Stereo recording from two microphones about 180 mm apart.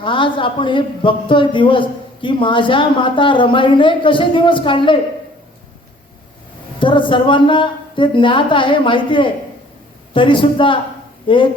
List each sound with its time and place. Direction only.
0.0 s a man's voice: 30° left (ahead or behind)
6.7 s a man's voice: 25° left (ahead or behind)